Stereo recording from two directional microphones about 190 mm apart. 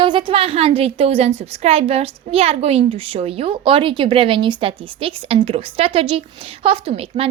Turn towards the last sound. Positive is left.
turn(degrees=-30)  # may be behind; listen again after turning